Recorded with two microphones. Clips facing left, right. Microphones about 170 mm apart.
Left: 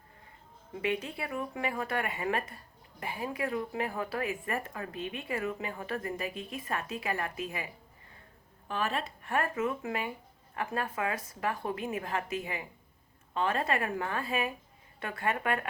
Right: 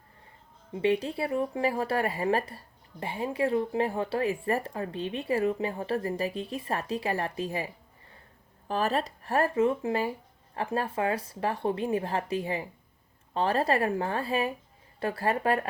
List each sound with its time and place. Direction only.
0.7 s speech: 30° right (ahead or behind)